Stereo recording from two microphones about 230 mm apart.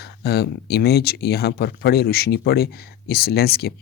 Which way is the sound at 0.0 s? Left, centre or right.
Left.